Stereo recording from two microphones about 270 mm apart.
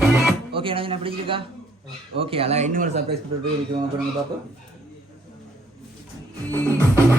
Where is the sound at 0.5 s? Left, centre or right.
Centre.